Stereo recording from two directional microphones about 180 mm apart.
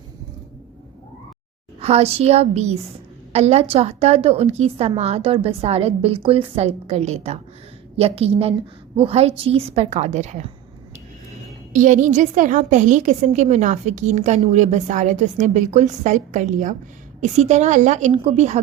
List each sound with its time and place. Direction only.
1.8 s a woman's voice: 35° right (ahead or behind)
11.7 s a woman's voice: 45° right (ahead or behind)